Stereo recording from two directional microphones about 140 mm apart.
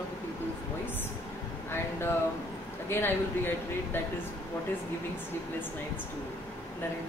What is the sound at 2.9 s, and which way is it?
Speech, 15° left (ahead or behind).